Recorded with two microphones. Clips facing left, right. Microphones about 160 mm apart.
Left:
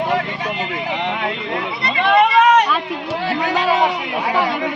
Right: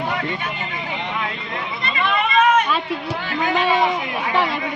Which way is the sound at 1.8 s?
75° left (ahead or behind).